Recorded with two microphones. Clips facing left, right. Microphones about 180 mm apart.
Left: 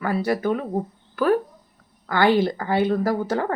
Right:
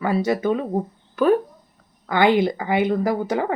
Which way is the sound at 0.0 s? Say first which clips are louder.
Right 2 dB; 20° right (ahead or behind).